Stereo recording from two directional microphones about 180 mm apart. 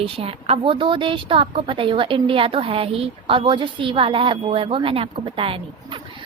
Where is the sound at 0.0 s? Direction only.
30° right (ahead or behind).